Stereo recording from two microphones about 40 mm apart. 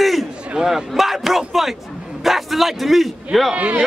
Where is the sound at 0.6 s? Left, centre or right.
Centre.